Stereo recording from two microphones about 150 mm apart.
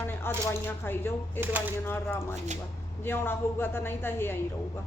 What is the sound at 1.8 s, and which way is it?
A woman's voice, 15° left (ahead or behind).